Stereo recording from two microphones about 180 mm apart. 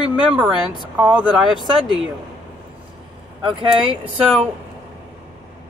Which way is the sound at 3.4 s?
30° right (ahead or behind).